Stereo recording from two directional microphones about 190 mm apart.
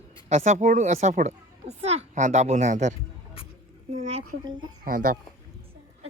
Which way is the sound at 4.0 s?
30° right (ahead or behind).